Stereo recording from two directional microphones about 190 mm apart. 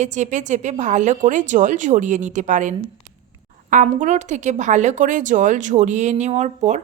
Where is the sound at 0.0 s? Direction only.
40° right (ahead or behind).